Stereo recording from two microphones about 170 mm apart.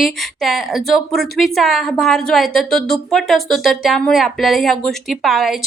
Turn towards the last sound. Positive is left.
turn(degrees=0)  # may be behind; listen again after turning